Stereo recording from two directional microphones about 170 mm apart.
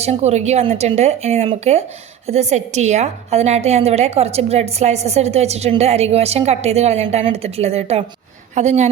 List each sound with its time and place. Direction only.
0.0 s a woman's voice: 40° right (ahead or behind)